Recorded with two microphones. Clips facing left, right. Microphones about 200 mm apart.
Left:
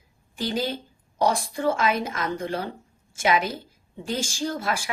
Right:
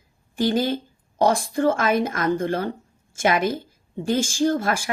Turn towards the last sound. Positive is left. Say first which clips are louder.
# right 6 dB
turn(degrees=-50)  # may be behind; listen again after turning